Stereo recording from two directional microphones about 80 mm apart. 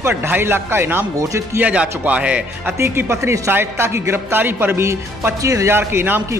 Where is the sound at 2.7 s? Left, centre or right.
Right.